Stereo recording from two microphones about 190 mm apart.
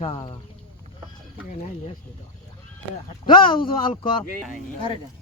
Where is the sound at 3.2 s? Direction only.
25° left (ahead or behind).